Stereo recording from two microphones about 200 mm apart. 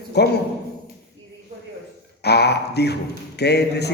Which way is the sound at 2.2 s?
55° left (ahead or behind).